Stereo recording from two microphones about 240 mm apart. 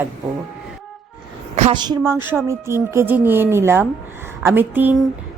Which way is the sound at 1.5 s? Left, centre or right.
Right.